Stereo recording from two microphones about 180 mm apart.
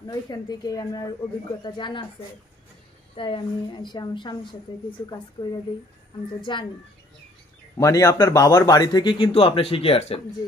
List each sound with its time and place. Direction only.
0.0 s speech: 20° left (ahead or behind)
3.2 s speech: 30° left (ahead or behind)
7.7 s speech: 15° left (ahead or behind); by 10.2 s 35° left (ahead or behind)